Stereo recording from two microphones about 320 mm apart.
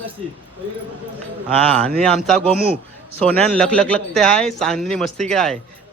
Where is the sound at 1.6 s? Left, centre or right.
Centre.